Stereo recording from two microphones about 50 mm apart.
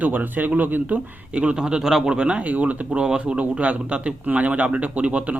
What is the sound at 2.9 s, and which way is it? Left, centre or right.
Speech, centre.